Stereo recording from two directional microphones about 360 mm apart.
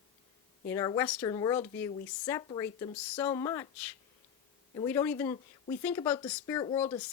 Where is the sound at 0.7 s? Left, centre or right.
Centre.